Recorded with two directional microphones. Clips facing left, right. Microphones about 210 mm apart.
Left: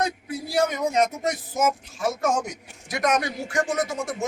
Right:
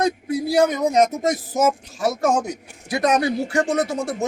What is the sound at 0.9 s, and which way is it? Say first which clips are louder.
Speech: right 5 dB; 40° right (ahead or behind).